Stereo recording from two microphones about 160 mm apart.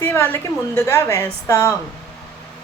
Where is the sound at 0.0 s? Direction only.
15° left (ahead or behind).